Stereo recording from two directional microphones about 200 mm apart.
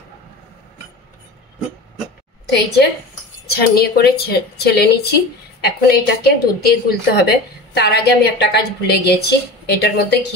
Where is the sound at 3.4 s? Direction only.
50° left (ahead or behind).